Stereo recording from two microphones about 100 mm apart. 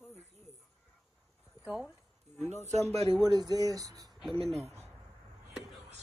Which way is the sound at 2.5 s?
90° right.